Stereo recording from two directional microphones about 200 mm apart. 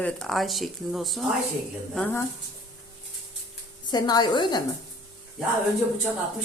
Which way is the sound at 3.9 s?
20° left (ahead or behind).